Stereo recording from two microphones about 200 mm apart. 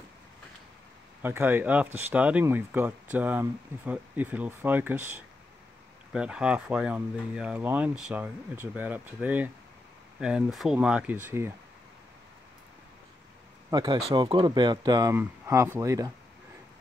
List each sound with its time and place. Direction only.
1.2 s speech: 10° right (ahead or behind)
13.7 s speech: 20° right (ahead or behind)